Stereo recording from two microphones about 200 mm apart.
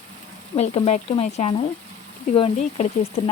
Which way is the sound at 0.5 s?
30° left (ahead or behind).